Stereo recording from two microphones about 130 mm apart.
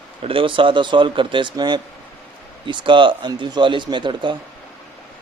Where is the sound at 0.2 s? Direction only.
45° right (ahead or behind).